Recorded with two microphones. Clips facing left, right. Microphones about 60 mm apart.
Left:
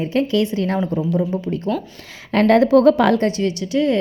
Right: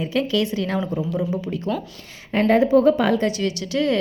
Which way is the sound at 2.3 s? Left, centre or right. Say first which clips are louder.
Left 3 dB; left.